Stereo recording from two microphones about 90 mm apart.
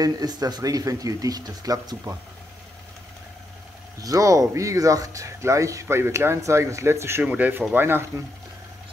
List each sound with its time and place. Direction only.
0.0 s speech: 45° right (ahead or behind)
4.0 s speech: 40° right (ahead or behind)
7.2 s speech: 20° right (ahead or behind)